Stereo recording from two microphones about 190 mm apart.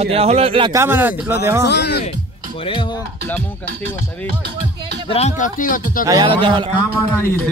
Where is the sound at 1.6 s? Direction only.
60° left (ahead or behind).